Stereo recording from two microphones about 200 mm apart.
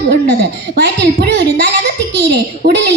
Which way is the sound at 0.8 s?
55° right (ahead or behind).